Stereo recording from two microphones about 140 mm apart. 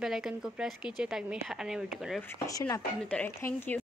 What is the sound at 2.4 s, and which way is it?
Speech, 25° left (ahead or behind).